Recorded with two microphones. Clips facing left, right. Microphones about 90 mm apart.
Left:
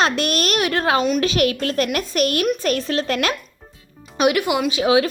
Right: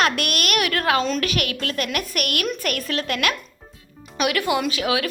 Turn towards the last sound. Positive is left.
turn(degrees=25)  # may be behind; listen again after turning